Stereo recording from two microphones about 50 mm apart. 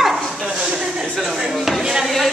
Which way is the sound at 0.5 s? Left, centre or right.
Centre.